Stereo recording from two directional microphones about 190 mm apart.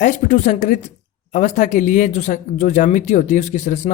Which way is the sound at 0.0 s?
40° left (ahead or behind).